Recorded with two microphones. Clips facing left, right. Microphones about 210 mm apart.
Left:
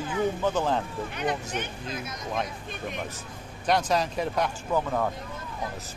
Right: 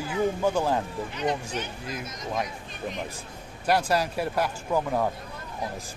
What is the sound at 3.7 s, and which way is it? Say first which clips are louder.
Speech: right 1 dB; 5° right (ahead or behind).